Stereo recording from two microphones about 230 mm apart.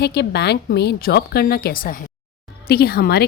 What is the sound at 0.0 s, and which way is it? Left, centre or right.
A woman's voice, left.